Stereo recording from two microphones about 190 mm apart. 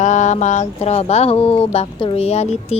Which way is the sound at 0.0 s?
40° left (ahead or behind).